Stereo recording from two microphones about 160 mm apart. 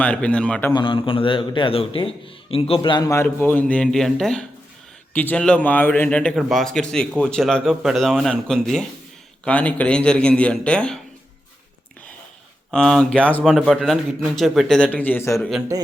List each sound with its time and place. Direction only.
0.0 s a man's voice: 10° left (ahead or behind)
0.7 s a man's voice: 30° left (ahead or behind)
3.2 s a man's voice: 10° left (ahead or behind)
12.7 s a man's voice: 5° left (ahead or behind)
13.5 s a man's voice: 5° right (ahead or behind)
14.9 s a man's voice: 10° left (ahead or behind)
15.4 s a man's voice: centre (ahead or behind)